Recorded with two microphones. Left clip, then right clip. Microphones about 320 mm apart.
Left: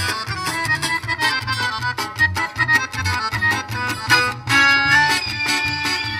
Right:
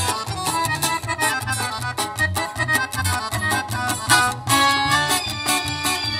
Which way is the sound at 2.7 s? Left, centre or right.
Right.